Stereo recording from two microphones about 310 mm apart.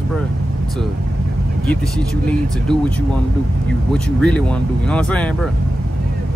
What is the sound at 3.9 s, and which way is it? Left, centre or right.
Speech, centre.